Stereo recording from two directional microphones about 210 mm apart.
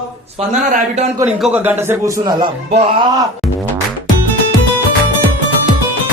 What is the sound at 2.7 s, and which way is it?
Speech, 30° right (ahead or behind).